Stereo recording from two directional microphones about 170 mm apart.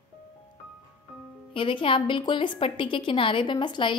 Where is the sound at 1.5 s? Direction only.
30° left (ahead or behind).